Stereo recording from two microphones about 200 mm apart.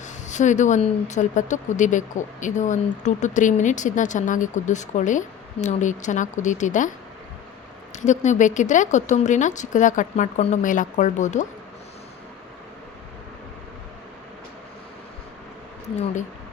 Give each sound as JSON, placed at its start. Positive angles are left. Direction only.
{"t": 0.0, "sound": "speech", "side_deg": 35}
{"t": 7.9, "sound": "speech", "side_deg": 35}